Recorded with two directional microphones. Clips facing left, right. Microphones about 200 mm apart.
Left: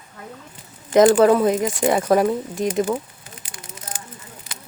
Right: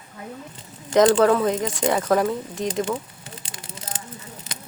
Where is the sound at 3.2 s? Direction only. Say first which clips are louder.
Right 3 dB; 30° right (ahead or behind).